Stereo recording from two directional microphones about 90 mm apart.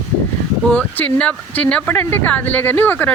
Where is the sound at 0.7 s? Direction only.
20° left (ahead or behind).